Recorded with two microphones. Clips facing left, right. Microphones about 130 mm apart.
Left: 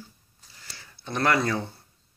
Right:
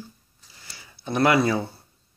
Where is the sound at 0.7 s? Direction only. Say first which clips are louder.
Right 6 dB; 10° right (ahead or behind).